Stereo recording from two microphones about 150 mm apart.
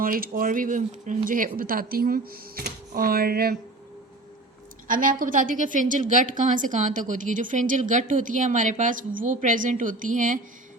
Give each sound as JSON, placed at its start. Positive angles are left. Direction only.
{"t": 0.0, "sound": "speech", "side_deg": -70}
{"t": 4.9, "sound": "speech", "side_deg": -65}